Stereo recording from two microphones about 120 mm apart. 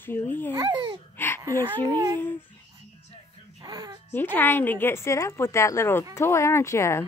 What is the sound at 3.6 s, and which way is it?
Babbling, 35° right (ahead or behind).